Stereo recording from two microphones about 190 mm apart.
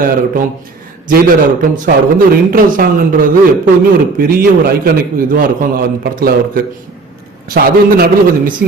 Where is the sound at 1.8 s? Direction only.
50° right (ahead or behind).